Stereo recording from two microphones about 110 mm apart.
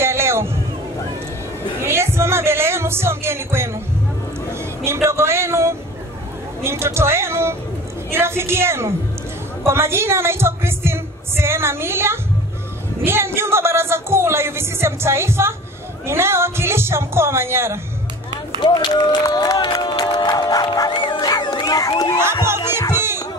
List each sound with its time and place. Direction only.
0.0 s hubbub: 25° right (ahead or behind)
1.8 s music: 20° right (ahead or behind)
4.8 s a sound: 25° right (ahead or behind)
6.6 s speech: 25° right (ahead or behind)
19.2 s music: 35° left (ahead or behind)
21.1 s crowd: 40° left (ahead or behind)
22.6 s music: 35° left (ahead or behind)